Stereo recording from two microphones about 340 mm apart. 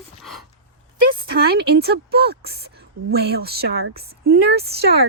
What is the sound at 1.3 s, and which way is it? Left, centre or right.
Speech, right.